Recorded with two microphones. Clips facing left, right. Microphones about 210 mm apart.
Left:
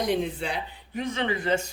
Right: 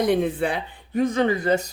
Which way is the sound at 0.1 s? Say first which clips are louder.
Right 6 dB; 55° right (ahead or behind).